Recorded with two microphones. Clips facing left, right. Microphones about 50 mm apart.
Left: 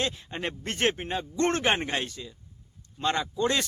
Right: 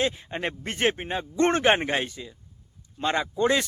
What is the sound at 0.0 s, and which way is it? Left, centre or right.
Speech, centre.